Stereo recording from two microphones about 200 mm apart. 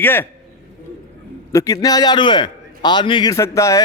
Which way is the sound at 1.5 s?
15° left (ahead or behind).